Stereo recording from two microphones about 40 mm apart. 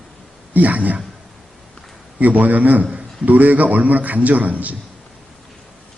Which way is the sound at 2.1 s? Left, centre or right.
Right.